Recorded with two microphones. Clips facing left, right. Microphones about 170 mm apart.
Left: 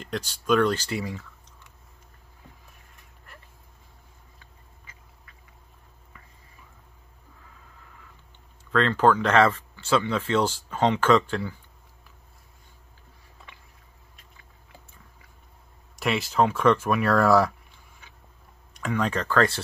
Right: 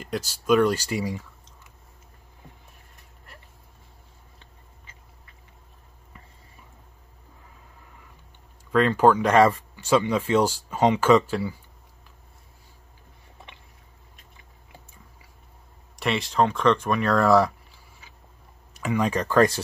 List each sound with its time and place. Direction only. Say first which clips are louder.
0.0 s speech: right 2 dB; 5° right (ahead or behind)
4.4 s a sound: right 1 dB; 25° right (ahead or behind)
8.7 s speech: right 2 dB; 10° right (ahead or behind)
16.0 s speech: even; centre (ahead or behind); by 19.6 s 15° right (ahead or behind)